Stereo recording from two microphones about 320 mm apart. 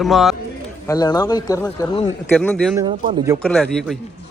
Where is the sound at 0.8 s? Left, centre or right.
Centre.